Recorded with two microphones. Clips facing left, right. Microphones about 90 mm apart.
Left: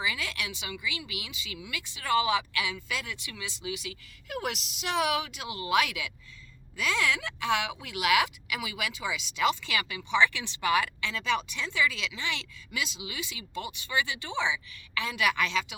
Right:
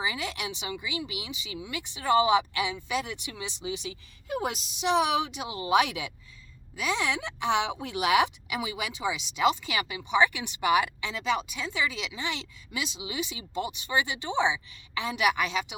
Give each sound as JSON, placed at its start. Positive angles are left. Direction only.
{"t": 0.0, "sound": "speech", "side_deg": -25}